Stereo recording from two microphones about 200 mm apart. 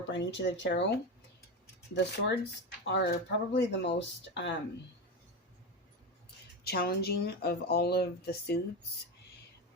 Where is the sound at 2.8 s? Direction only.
60° left (ahead or behind).